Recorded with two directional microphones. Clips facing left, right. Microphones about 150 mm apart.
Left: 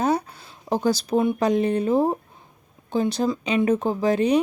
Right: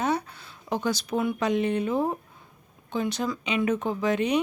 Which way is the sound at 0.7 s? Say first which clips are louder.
Left 6 dB; 35° left (ahead or behind).